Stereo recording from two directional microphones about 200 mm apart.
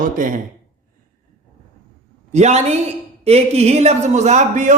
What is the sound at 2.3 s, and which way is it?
A man's voice, 35° right (ahead or behind).